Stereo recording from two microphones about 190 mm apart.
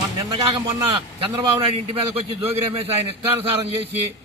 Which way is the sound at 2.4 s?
30° right (ahead or behind).